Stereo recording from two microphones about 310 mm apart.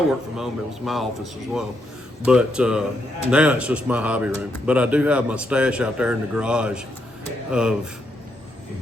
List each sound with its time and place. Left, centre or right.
0.1 s a man's voice: centre